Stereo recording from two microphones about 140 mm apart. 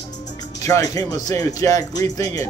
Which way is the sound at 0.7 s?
25° left (ahead or behind).